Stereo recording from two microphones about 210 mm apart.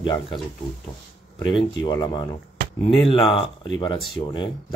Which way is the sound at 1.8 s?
20° left (ahead or behind).